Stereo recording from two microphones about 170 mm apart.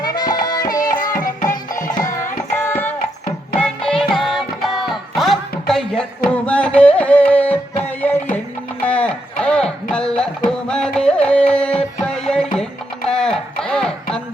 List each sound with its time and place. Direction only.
0.0 s music: 25° left (ahead or behind)
1.2 s music: 50° left (ahead or behind)
1.7 s music: 25° left (ahead or behind)
2.1 s carnatic music: 15° left (ahead or behind)
3.6 s music: 5° left (ahead or behind)
8.8 s a sound: 10° left (ahead or behind)
10.5 s music: 5° left (ahead or behind)
13.1 s a sound: 5° left (ahead or behind)